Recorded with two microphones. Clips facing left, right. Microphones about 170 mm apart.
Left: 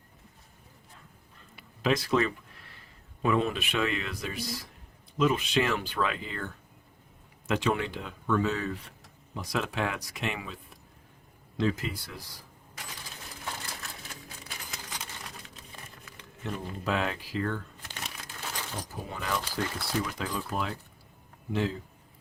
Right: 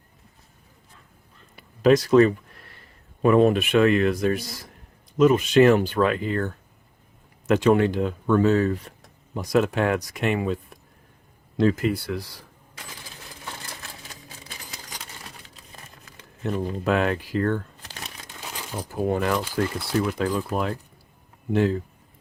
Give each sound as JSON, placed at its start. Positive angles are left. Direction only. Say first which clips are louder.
{"t": 1.5, "sound": "a sound", "louder": "right 10 dB", "side_deg": -45}
{"t": 3.2, "sound": "speech", "louder": "right 10 dB", "side_deg": -50}
{"t": 15.4, "sound": "crumpling", "louder": "right 1 dB", "side_deg": -40}
{"t": 16.8, "sound": "speech", "louder": "right 7 dB", "side_deg": -55}
{"t": 18.9, "sound": "speech", "louder": "right 12 dB", "side_deg": -55}